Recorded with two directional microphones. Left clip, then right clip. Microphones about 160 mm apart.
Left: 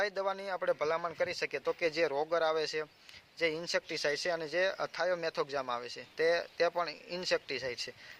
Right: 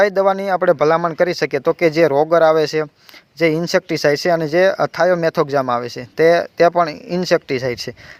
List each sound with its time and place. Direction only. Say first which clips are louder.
0.0 s speech: right 19 dB; 55° right (ahead or behind)